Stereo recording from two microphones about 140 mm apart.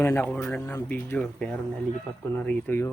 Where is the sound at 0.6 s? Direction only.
25° left (ahead or behind).